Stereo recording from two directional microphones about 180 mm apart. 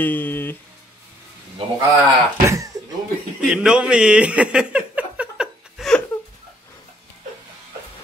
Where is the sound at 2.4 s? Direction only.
15° right (ahead or behind).